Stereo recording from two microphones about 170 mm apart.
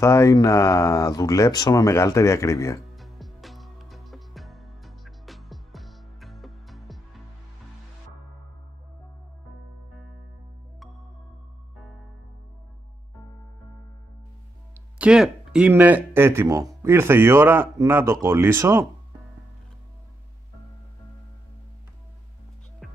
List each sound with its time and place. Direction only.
0.0 s speech: 15° left (ahead or behind)
3.0 s music: centre (ahead or behind)
14.7 s speech: 5° right (ahead or behind)
22.8 s music: centre (ahead or behind)